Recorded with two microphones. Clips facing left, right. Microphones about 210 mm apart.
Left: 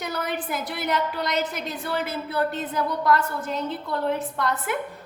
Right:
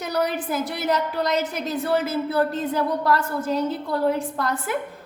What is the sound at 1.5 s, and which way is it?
A woman's voice, 35° right (ahead or behind).